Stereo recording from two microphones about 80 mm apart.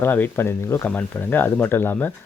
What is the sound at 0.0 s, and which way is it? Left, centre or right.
Speech, left.